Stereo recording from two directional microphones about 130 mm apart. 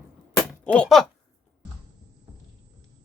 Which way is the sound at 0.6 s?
10° left (ahead or behind).